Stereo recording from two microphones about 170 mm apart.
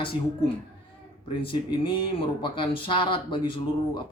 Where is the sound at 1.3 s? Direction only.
30° left (ahead or behind).